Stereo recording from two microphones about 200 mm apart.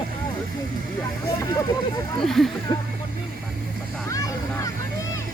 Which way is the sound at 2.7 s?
20° left (ahead or behind).